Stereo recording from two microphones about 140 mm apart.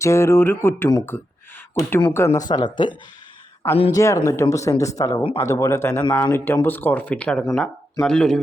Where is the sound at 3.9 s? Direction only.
20° left (ahead or behind); by 8.4 s 5° left (ahead or behind).